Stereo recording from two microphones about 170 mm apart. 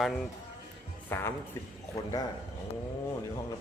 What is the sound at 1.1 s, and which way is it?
Speech, 15° left (ahead or behind).